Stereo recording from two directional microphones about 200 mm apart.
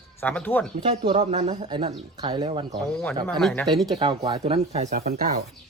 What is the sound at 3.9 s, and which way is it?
Speech, 25° right (ahead or behind).